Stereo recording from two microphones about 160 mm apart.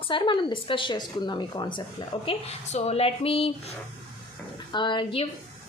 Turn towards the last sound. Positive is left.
turn(degrees=35)  # may be behind; listen again after turning